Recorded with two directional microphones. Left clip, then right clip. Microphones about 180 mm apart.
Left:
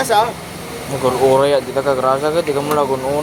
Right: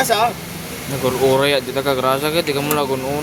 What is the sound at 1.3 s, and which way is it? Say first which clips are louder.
Speech: left 3 dB; 25° right (ahead or behind).